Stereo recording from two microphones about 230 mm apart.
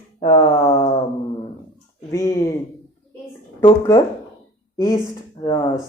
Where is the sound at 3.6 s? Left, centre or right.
Centre.